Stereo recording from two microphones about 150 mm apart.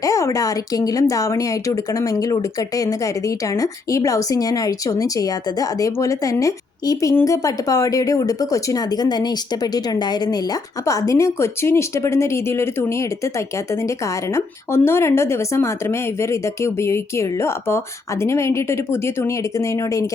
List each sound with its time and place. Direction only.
0.0 s speech: 20° left (ahead or behind)